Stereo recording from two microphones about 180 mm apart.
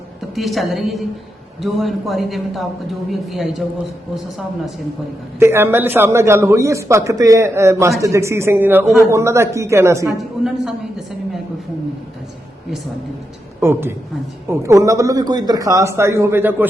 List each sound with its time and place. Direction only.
0.3 s a man's voice: centre (ahead or behind)
5.4 s a man's voice: 15° right (ahead or behind)
13.6 s a man's voice: 15° right (ahead or behind)